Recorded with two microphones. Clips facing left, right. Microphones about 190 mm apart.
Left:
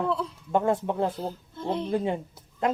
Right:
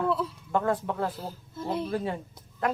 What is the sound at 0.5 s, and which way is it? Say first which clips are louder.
Speech: left 3 dB; 25° left (ahead or behind).